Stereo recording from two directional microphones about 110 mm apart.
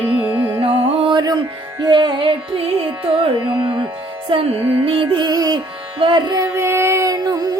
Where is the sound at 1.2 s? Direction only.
40° right (ahead or behind).